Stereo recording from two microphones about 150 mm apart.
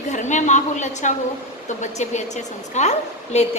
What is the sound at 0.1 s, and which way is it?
A woman's voice, 55° left (ahead or behind).